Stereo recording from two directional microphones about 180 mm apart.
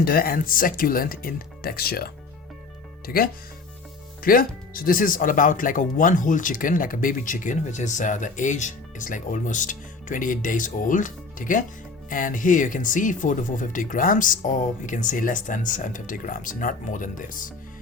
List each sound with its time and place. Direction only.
0.0 s speech: 55° left (ahead or behind)
4.2 s speech: 55° left (ahead or behind)